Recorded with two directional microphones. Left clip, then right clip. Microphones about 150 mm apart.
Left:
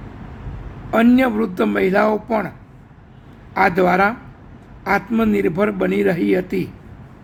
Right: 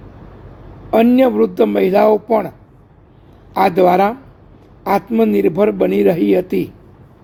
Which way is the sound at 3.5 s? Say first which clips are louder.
Right 4 dB; 25° right (ahead or behind).